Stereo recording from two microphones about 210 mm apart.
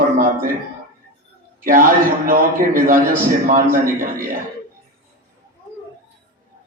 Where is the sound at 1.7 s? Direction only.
40° right (ahead or behind).